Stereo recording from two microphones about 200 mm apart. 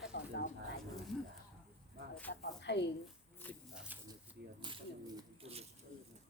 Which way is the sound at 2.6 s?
60° left (ahead or behind).